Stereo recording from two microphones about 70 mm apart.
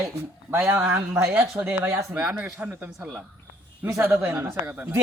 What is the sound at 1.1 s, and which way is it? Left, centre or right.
Speech, centre.